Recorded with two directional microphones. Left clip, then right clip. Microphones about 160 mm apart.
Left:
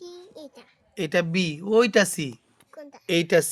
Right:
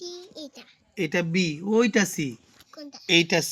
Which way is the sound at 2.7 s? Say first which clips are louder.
Right 4 dB; 35° left (ahead or behind).